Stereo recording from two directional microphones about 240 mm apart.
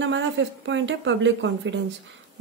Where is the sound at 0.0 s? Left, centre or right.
Right.